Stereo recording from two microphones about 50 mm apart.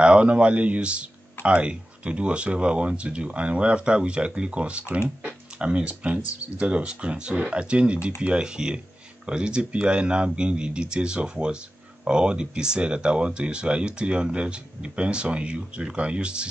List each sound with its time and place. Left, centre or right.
0.0 s speech: right